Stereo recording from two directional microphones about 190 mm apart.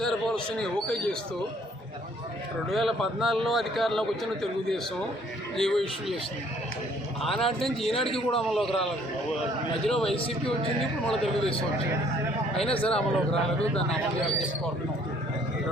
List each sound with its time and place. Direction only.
0.0 s a sound: 5° left (ahead or behind)
0.5 s a man's voice: 5° left (ahead or behind)
2.6 s a man's voice: centre (ahead or behind)
7.2 s a man's voice: centre (ahead or behind)
7.9 s a man's voice: 30° left (ahead or behind)
8.4 s a man's voice: centre (ahead or behind)
9.9 s a man's voice: centre (ahead or behind)
12.8 s a man's voice: 5° left (ahead or behind)